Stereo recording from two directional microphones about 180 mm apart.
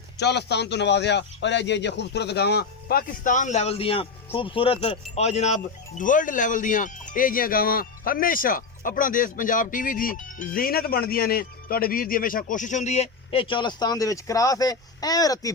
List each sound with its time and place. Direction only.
0.2 s a man's voice: 70° left (ahead or behind); by 15.5 s 20° left (ahead or behind)